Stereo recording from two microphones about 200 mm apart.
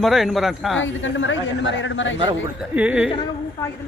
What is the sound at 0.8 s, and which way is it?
A woman's voice, 70° left (ahead or behind).